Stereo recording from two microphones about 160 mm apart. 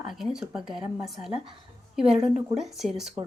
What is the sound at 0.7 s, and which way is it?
Speech, 30° right (ahead or behind).